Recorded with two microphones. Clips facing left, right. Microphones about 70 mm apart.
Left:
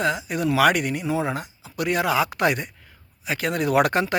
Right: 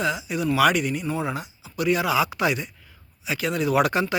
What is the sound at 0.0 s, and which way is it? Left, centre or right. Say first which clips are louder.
Speech: left 2 dB; left.